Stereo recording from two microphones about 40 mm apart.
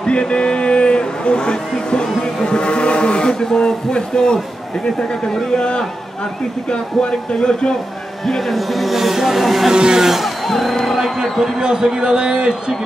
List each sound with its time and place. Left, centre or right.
0.0 s speech: left
5.6 s speech: left
8.3 s speech: centre
9.7 s a man's voice: centre
10.0 s music: centre
10.4 s speech: centre
11.2 s a man's voice: centre
11.6 s a man's voice: centre